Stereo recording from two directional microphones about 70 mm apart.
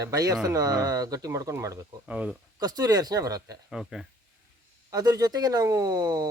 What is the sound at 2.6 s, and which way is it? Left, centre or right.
Speech, right.